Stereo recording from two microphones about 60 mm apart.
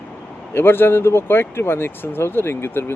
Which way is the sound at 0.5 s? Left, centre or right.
Left.